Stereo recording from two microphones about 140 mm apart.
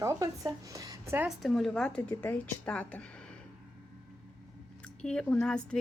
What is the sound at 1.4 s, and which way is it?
A woman's voice, centre (ahead or behind).